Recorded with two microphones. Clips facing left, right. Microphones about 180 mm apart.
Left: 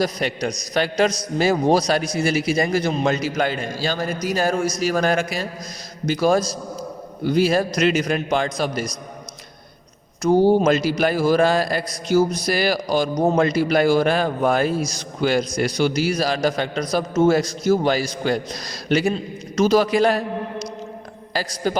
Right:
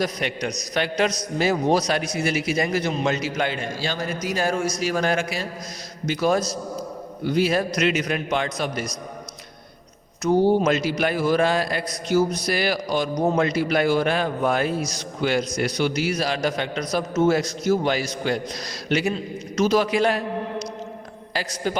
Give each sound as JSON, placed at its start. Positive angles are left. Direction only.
{"t": 0.0, "sound": "a man's voice", "side_deg": 35}
{"t": 7.3, "sound": "a man's voice", "side_deg": 35}
{"t": 10.2, "sound": "a man's voice", "side_deg": 35}
{"t": 21.3, "sound": "a man's voice", "side_deg": 40}